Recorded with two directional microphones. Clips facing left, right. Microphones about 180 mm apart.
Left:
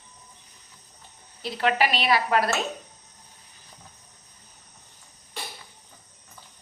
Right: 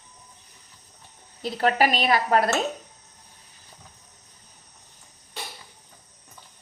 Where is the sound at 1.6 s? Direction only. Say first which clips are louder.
Right 2 dB; 40° right (ahead or behind).